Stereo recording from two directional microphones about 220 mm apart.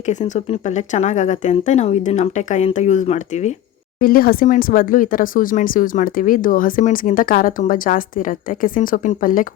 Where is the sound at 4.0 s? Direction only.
40° left (ahead or behind).